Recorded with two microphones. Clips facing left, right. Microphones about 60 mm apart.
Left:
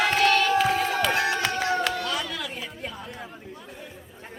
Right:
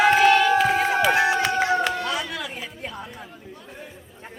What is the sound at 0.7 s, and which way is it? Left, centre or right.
Crowd, right.